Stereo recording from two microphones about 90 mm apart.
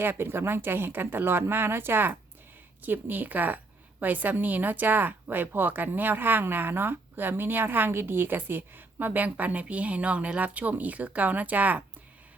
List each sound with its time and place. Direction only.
0.0 s speech: 25° right (ahead or behind)